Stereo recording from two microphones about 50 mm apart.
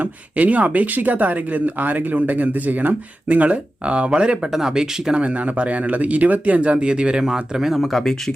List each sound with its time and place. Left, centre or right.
0.0 s speech: right
4.5 s speech: centre
5.2 s speech: right
7.7 s speech: centre